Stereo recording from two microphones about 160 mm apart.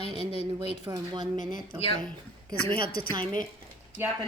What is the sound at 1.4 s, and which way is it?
Speech, 25° right (ahead or behind).